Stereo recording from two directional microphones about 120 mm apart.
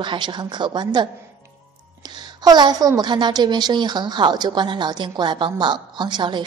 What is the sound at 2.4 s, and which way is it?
Speech, 35° right (ahead or behind).